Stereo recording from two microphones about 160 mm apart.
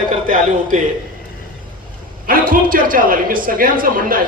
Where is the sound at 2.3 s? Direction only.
60° right (ahead or behind).